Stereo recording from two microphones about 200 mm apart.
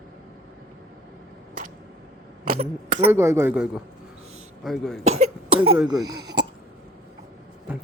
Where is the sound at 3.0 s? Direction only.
15° right (ahead or behind).